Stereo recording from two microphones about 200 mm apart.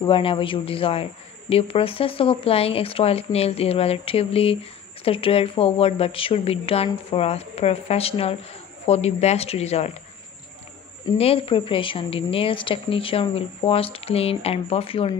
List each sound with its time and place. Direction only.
0.0 s a woman's voice: 25° left (ahead or behind)
11.1 s a woman's voice: 30° left (ahead or behind)